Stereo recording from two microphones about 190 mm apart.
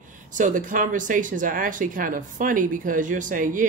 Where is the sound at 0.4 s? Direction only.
45° right (ahead or behind).